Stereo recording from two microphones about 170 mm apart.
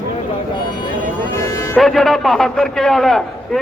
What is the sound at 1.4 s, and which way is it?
Music, 15° left (ahead or behind).